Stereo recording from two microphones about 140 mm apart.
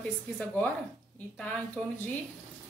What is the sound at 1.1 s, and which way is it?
Speech, 10° left (ahead or behind).